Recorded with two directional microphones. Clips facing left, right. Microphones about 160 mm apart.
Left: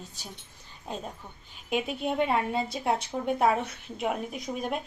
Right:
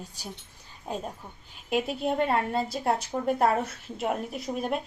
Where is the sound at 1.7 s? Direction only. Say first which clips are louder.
Right 2 dB; centre (ahead or behind).